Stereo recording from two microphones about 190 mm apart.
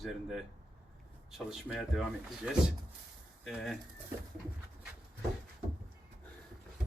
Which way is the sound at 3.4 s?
Centre (ahead or behind).